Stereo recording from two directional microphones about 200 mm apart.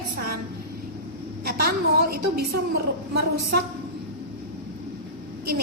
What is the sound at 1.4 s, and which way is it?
A woman's voice, 50° right (ahead or behind).